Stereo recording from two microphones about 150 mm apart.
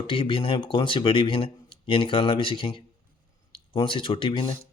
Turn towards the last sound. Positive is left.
turn(degrees=35)  # may be behind; listen again after turning